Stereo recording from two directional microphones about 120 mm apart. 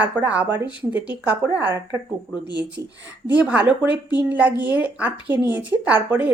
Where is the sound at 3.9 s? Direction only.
40° left (ahead or behind).